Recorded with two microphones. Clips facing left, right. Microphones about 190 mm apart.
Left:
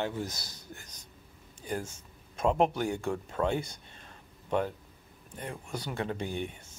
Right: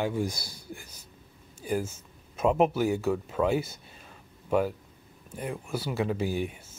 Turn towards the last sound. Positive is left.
turn(degrees=-5)  # may be behind; listen again after turning